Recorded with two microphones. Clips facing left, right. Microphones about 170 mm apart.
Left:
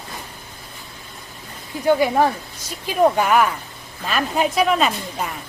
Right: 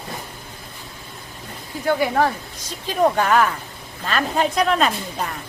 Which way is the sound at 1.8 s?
15° left (ahead or behind).